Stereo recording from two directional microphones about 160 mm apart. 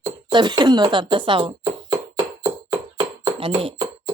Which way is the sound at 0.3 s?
30° right (ahead or behind).